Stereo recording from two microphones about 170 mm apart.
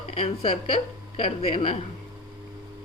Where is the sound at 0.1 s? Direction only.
35° left (ahead or behind).